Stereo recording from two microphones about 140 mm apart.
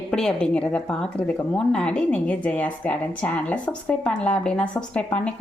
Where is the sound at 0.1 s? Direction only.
5° left (ahead or behind).